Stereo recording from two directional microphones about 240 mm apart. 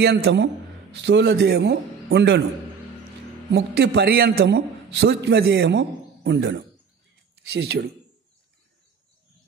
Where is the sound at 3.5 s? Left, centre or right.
Right.